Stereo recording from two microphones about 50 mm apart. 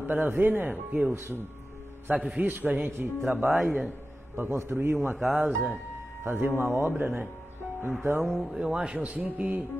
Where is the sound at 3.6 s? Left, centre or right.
Centre.